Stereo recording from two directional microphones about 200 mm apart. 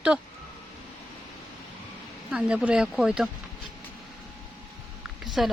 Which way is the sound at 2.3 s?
5° right (ahead or behind).